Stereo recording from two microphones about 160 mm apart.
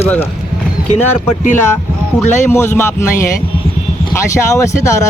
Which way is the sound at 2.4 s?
15° left (ahead or behind).